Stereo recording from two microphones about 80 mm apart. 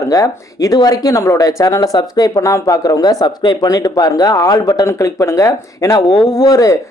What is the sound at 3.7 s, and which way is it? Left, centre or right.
Speech, left.